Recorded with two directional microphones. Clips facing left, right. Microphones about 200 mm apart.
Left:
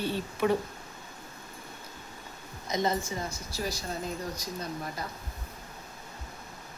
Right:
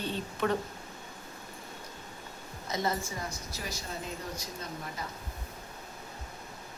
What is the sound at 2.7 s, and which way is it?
Speech, 20° left (ahead or behind).